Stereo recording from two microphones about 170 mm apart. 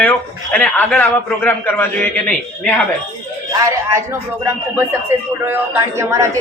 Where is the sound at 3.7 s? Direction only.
15° right (ahead or behind).